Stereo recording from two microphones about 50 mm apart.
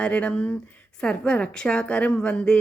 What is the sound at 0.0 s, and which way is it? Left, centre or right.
A woman's voice, left.